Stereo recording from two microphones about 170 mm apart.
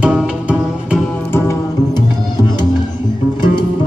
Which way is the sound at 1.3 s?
15° left (ahead or behind).